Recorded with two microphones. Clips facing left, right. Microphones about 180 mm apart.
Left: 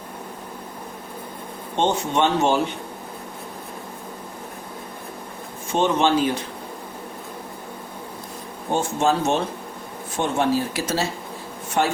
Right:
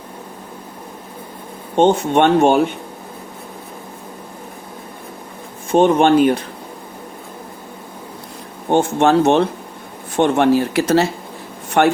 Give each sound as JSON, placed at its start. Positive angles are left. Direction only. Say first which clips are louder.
{"t": 1.7, "sound": "speech", "louder": "right 8 dB", "side_deg": -55}
{"t": 5.7, "sound": "speech", "louder": "right 7 dB", "side_deg": -55}
{"t": 8.7, "sound": "speech", "louder": "right 7 dB", "side_deg": -65}